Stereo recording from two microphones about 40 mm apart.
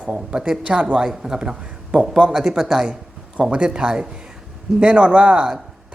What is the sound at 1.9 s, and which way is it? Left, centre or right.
Speech, right.